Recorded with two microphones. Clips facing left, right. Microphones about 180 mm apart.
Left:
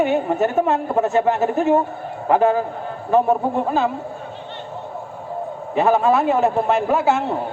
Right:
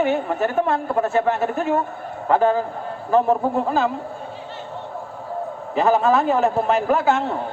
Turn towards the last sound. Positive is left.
turn(degrees=10)  # may be behind; listen again after turning